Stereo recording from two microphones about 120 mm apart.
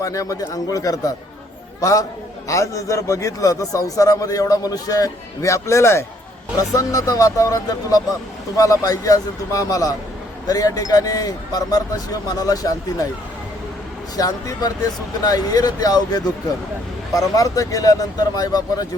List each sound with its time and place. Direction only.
0.0 s a man's voice: 25° left (ahead or behind)
14.2 s a man's voice: 30° left (ahead or behind)